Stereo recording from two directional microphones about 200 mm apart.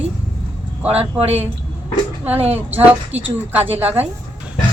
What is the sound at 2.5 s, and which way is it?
Speech, 10° right (ahead or behind).